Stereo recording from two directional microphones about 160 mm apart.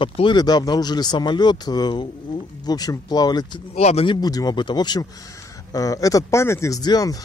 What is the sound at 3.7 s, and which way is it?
Speech, 40° left (ahead or behind).